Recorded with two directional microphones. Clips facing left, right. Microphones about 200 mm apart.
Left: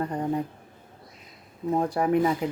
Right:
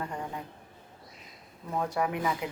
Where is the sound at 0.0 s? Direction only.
35° left (ahead or behind).